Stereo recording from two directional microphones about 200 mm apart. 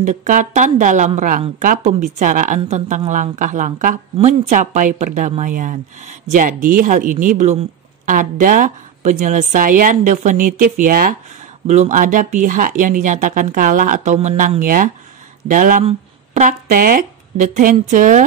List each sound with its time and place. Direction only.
0.0 s a woman's voice: 40° right (ahead or behind)
11.6 s a woman's voice: 35° right (ahead or behind)